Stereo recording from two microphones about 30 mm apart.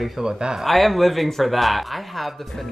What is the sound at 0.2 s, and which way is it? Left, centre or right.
Speech, right.